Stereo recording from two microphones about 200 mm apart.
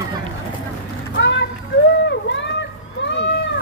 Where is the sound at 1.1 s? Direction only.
60° left (ahead or behind).